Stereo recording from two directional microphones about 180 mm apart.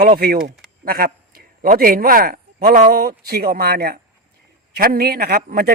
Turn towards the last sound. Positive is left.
turn(degrees=-60)  # may be behind; listen again after turning